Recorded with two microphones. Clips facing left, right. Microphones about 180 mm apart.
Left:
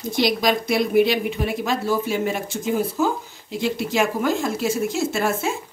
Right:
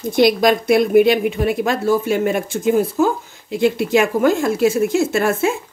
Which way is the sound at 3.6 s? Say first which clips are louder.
Right 6 dB; 60° right (ahead or behind).